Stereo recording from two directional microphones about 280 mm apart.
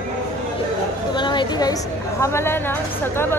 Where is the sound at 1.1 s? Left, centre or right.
Centre.